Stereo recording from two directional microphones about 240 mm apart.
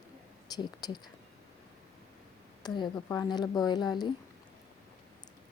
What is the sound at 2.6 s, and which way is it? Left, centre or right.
Speech, centre.